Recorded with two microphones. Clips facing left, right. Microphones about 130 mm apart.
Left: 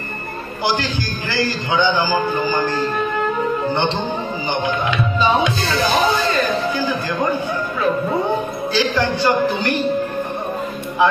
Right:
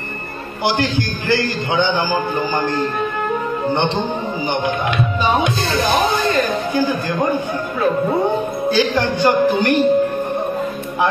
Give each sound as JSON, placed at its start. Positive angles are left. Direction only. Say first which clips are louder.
{"t": 0.7, "sound": "a man's voice", "louder": "right 3 dB", "side_deg": -55}
{"t": 5.2, "sound": "speech", "louder": "left 1 dB", "side_deg": -50}
{"t": 8.7, "sound": "a man's voice", "louder": "even", "side_deg": -50}